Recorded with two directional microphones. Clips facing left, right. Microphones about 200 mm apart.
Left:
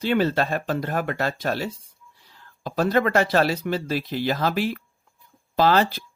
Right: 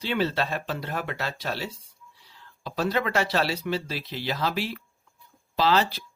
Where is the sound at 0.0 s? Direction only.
50° left (ahead or behind).